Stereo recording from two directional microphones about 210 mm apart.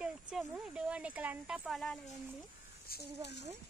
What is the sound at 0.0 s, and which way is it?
Speech, 5° right (ahead or behind).